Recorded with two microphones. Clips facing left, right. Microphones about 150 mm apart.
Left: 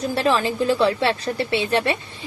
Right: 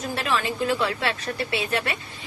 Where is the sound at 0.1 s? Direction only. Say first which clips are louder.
Left 5 dB; 30° left (ahead or behind).